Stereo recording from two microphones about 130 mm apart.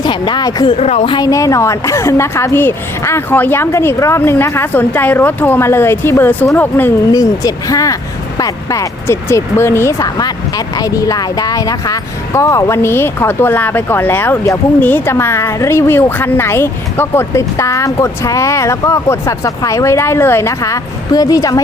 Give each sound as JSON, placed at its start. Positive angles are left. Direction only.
{"t": 0.0, "sound": "speech", "side_deg": 35}
{"t": 0.8, "sound": "a woman's voice", "side_deg": 50}
{"t": 1.1, "sound": "speech", "side_deg": 25}
{"t": 7.1, "sound": "speech", "side_deg": 30}